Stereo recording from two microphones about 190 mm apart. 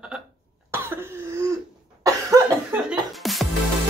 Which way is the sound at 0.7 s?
10° right (ahead or behind).